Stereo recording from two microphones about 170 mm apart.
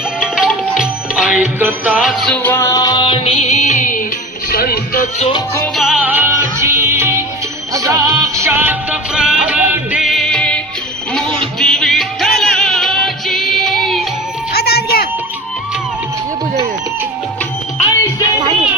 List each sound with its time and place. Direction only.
0.2 s music: centre (ahead or behind); by 5.0 s 60° left (ahead or behind)
5.7 s music: centre (ahead or behind)
14.5 s music: 70° left (ahead or behind)